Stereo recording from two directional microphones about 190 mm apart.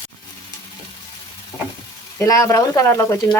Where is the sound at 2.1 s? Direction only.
15° left (ahead or behind).